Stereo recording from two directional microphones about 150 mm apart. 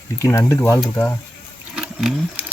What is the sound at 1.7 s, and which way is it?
Roaring cats, 5° right (ahead or behind).